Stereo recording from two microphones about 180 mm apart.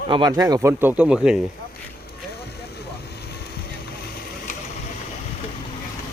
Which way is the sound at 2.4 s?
65° left (ahead or behind).